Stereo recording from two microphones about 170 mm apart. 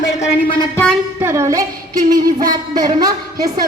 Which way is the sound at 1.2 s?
15° right (ahead or behind).